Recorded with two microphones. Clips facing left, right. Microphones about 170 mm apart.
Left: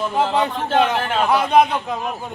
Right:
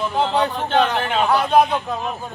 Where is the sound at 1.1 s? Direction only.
Centre (ahead or behind).